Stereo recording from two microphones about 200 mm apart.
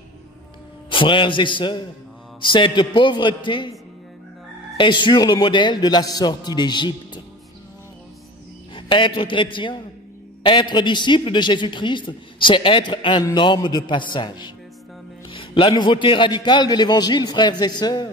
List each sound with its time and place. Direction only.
0.8 s a man's voice: 25° left (ahead or behind)
4.7 s a man's voice: 25° left (ahead or behind)
8.7 s a man's voice: 25° left (ahead or behind)